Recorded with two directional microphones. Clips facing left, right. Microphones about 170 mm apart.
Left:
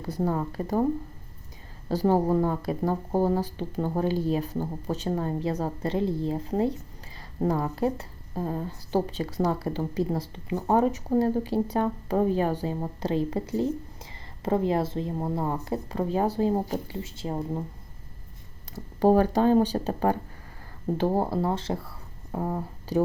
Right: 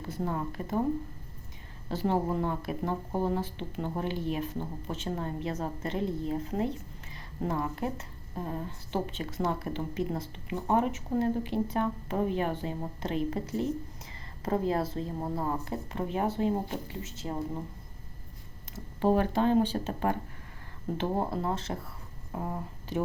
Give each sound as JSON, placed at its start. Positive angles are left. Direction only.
{"t": 0.1, "sound": "speech", "side_deg": 35}
{"t": 1.9, "sound": "speech", "side_deg": 40}
{"t": 18.9, "sound": "speech", "side_deg": 40}